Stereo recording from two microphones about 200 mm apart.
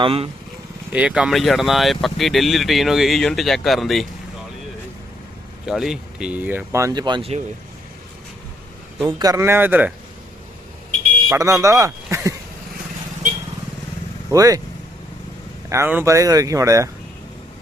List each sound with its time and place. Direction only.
0.0 s speech: 25° right (ahead or behind)
0.9 s speech: 5° right (ahead or behind)
5.6 s speech: centre (ahead or behind); by 7.4 s 30° right (ahead or behind)
9.0 s speech: 20° right (ahead or behind)
11.3 s speech: 15° right (ahead or behind)
14.3 s speech: 15° right (ahead or behind)
15.7 s speech: 10° right (ahead or behind)